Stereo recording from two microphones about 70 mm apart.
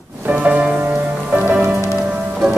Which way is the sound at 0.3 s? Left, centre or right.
Centre.